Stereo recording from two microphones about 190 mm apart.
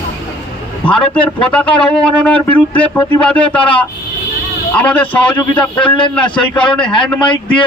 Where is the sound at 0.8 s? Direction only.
5° left (ahead or behind).